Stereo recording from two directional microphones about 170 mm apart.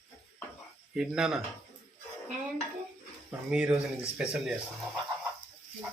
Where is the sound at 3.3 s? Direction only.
5° right (ahead or behind).